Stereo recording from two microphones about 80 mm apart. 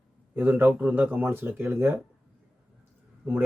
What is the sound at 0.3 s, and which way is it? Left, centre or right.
Speech, right.